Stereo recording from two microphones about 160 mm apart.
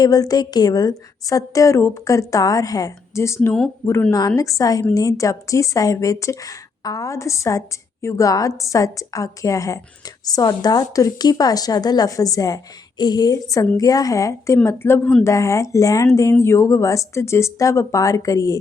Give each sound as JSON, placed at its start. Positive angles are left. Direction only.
{"t": 0.0, "sound": "a woman's voice", "side_deg": 25}